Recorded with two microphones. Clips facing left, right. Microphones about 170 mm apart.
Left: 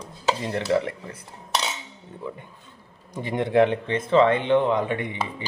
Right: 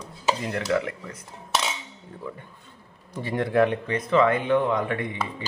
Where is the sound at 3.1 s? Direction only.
20° left (ahead or behind).